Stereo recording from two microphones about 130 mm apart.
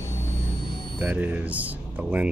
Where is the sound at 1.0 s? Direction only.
10° right (ahead or behind).